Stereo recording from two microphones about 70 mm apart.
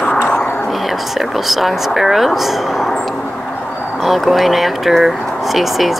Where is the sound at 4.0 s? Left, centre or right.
Centre.